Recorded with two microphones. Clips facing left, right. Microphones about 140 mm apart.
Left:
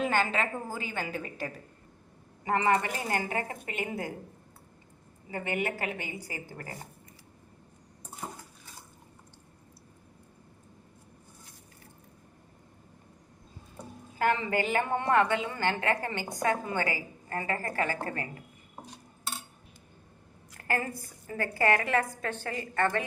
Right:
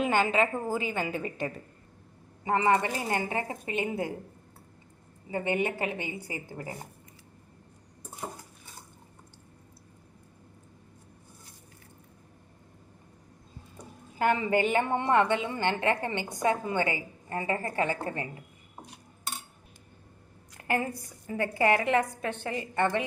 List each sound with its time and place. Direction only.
0.3 s a woman's voice: centre (ahead or behind)
2.4 s a woman's voice: 20° right (ahead or behind)
5.3 s a woman's voice: 25° right (ahead or behind)
14.2 s a woman's voice: 20° right (ahead or behind)
20.6 s a sound: 20° right (ahead or behind)
21.2 s a woman's voice: 20° right (ahead or behind)